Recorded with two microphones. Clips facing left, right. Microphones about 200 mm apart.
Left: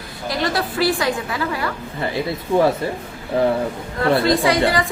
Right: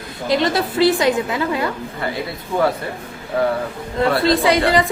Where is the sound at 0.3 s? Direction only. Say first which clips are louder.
Right 4 dB; 25° right (ahead or behind).